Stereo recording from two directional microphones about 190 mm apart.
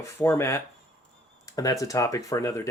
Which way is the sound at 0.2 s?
15° left (ahead or behind).